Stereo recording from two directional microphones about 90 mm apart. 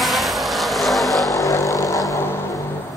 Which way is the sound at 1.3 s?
35° left (ahead or behind).